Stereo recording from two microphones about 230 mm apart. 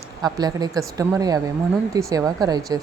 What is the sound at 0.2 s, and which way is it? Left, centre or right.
Speech, centre.